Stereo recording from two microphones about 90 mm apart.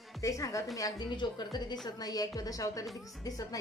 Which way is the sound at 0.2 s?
35° left (ahead or behind).